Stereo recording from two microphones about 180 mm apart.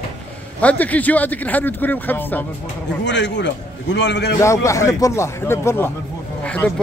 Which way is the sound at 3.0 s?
80° left.